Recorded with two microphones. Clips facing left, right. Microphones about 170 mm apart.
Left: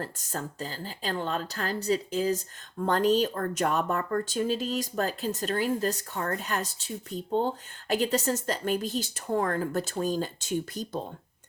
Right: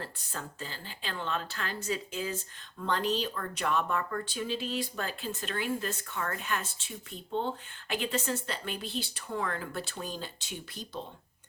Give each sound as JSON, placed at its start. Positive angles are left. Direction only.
{"t": 0.0, "sound": "speech", "side_deg": 40}